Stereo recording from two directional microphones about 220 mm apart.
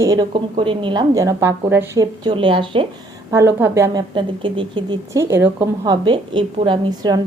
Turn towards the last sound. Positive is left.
turn(degrees=-20)  # may be behind; listen again after turning